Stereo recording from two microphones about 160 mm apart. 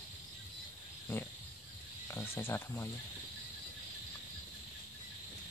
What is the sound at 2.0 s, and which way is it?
Speech, 15° left (ahead or behind).